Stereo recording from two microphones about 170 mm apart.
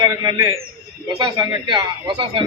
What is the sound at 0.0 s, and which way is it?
Speech, 20° right (ahead or behind).